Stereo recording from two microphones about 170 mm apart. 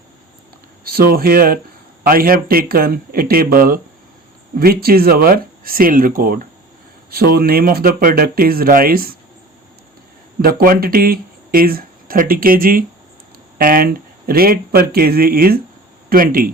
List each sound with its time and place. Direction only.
0.9 s speech: 60° right (ahead or behind)
10.4 s speech: 60° right (ahead or behind)